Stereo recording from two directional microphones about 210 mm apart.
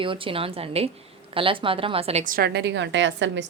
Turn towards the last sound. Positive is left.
turn(degrees=-60)  # may be behind; listen again after turning